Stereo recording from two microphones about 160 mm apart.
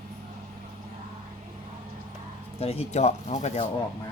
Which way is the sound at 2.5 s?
40° left (ahead or behind).